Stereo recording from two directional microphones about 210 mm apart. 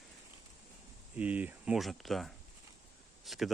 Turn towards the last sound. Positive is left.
turn(degrees=0)  # may be behind; listen again after turning